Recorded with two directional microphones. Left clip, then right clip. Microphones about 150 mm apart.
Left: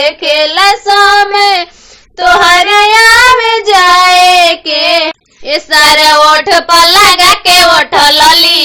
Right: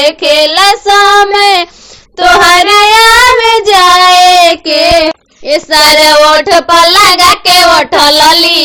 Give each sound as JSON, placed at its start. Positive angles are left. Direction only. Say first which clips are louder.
{"t": 0.0, "sound": "child singing", "louder": "right 2 dB", "side_deg": -35}